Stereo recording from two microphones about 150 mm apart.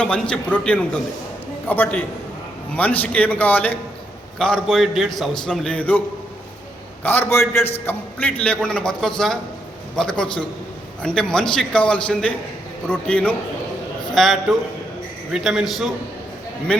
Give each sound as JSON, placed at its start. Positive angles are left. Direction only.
{"t": 0.0, "sound": "a man's voice", "side_deg": 5}
{"t": 7.0, "sound": "a man's voice", "side_deg": 15}